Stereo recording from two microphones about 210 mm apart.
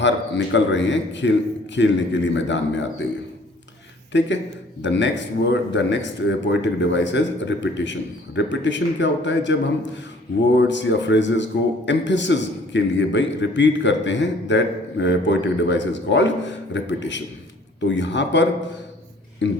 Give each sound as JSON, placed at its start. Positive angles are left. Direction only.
{"t": 0.0, "sound": "a man's voice", "side_deg": 60}
{"t": 4.1, "sound": "a man's voice", "side_deg": 60}